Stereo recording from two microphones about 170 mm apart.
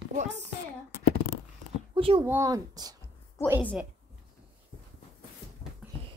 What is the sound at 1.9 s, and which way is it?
Speech, 30° right (ahead or behind).